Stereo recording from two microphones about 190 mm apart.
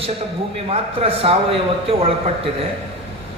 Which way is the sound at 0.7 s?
30° right (ahead or behind).